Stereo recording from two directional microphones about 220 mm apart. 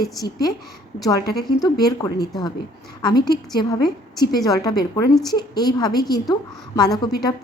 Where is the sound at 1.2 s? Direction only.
45° left (ahead or behind).